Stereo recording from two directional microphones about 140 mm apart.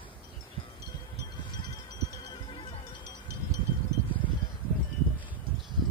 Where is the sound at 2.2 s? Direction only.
35° left (ahead or behind).